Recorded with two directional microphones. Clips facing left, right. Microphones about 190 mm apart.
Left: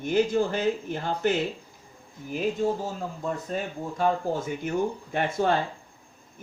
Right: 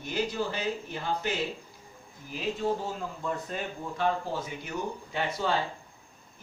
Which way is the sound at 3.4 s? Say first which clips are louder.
Left 4 dB; 40° left (ahead or behind).